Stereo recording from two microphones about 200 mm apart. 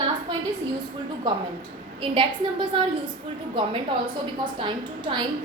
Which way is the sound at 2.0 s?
25° right (ahead or behind).